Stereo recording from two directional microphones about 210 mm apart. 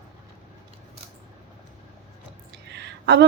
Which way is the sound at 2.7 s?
55° right (ahead or behind).